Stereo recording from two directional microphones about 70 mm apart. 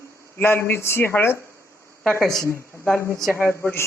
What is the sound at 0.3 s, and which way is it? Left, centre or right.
Speech, left.